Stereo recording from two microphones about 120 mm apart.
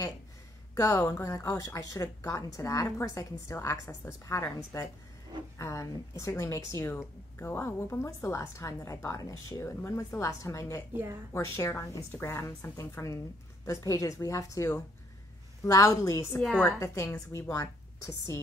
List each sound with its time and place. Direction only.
1.1 s speech: 25° left (ahead or behind)
5.6 s speech: 25° left (ahead or behind)
10.9 s a woman's voice: 20° right (ahead or behind)
11.5 s speech: 25° left (ahead or behind)
16.3 s a woman's voice: 5° left (ahead or behind)
16.8 s speech: 25° left (ahead or behind)